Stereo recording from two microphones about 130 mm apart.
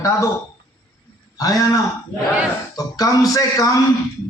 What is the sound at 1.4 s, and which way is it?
A man's voice, 30° left (ahead or behind).